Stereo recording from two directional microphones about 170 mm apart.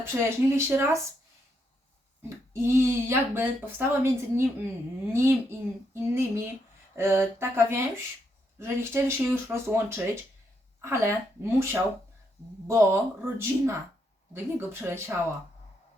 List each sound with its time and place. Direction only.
0.0 s a woman's voice: 15° right (ahead or behind)
2.5 s a woman's voice: 15° right (ahead or behind)